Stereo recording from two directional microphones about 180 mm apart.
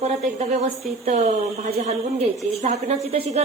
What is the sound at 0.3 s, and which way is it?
A woman's voice, 40° right (ahead or behind).